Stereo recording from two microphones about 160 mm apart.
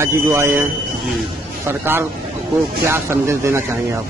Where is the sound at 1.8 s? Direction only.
15° right (ahead or behind).